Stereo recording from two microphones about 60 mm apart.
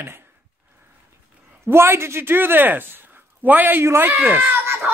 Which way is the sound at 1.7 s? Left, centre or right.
Right.